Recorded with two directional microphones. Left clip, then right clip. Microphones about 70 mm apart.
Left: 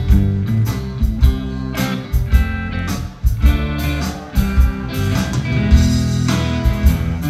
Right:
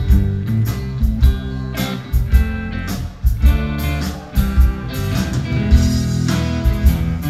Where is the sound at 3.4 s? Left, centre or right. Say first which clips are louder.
Left 2 dB; centre.